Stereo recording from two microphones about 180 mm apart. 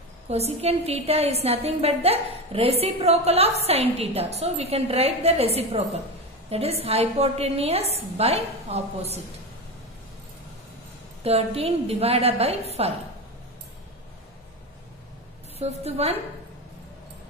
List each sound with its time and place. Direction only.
0.3 s a woman's voice: 35° right (ahead or behind)
11.2 s a woman's voice: 35° right (ahead or behind)
15.6 s a woman's voice: 35° right (ahead or behind)